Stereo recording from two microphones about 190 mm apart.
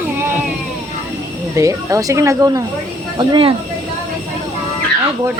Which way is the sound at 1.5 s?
15° right (ahead or behind).